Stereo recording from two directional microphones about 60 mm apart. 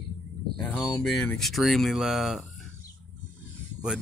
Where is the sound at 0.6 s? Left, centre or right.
Left.